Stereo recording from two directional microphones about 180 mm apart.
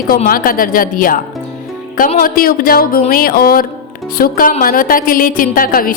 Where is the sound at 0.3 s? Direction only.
50° left (ahead or behind).